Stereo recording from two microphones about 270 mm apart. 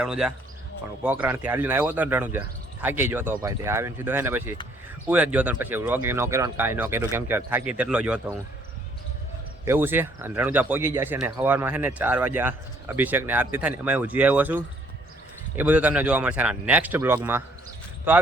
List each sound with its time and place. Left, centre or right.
0.0 s speech: centre
9.6 s speech: centre